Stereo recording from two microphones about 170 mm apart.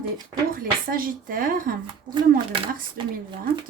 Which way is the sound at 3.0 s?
30° right (ahead or behind).